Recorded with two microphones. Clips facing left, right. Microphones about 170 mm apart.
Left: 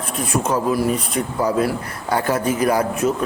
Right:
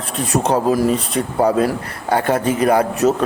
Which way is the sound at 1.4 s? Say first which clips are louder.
Right 3 dB; 60° right (ahead or behind).